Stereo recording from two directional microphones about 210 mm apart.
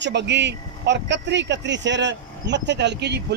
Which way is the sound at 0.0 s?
55° right (ahead or behind).